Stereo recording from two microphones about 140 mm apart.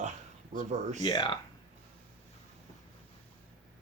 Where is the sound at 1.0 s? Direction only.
35° left (ahead or behind).